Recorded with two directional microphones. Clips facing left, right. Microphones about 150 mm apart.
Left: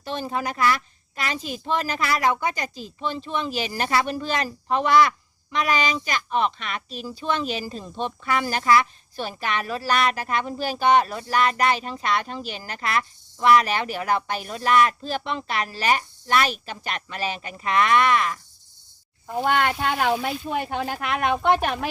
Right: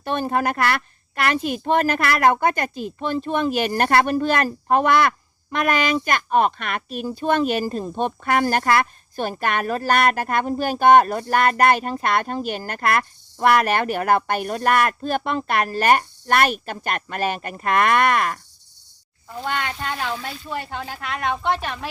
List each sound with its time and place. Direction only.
0.0 s a woman's voice: 55° right (ahead or behind)
19.4 s speech: 55° left (ahead or behind)